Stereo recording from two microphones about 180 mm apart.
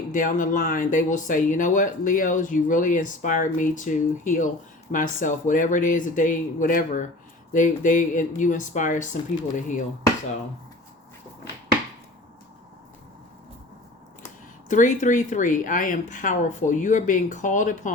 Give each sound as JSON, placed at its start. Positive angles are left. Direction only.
{"t": 0.1, "sound": "speech", "side_deg": 45}
{"t": 14.7, "sound": "speech", "side_deg": 45}